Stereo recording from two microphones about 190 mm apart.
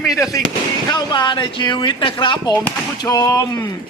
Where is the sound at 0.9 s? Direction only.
20° left (ahead or behind).